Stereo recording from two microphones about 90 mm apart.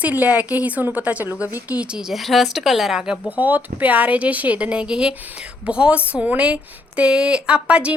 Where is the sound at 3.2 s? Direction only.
20° right (ahead or behind).